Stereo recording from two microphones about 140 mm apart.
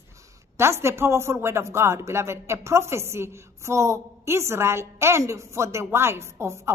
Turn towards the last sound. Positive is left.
turn(degrees=-20)  # may be behind; listen again after turning